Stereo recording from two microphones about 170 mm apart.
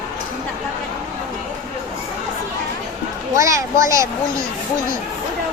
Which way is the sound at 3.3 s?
20° right (ahead or behind).